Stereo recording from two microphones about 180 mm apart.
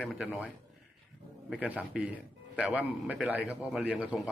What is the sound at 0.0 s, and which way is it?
Speech, centre (ahead or behind).